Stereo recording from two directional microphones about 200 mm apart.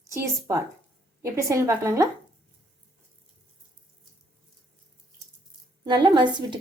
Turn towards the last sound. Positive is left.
turn(degrees=-20)  # may be behind; listen again after turning